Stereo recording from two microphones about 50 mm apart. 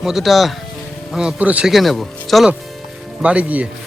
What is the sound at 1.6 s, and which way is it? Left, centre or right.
Speech, centre.